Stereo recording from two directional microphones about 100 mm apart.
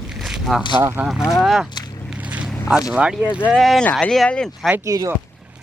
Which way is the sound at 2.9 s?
10° right (ahead or behind).